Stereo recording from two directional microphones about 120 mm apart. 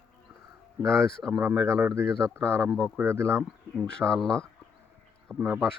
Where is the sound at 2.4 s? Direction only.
10° left (ahead or behind).